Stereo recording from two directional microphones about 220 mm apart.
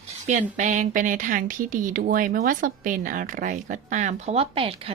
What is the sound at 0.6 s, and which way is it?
Speech, 35° right (ahead or behind).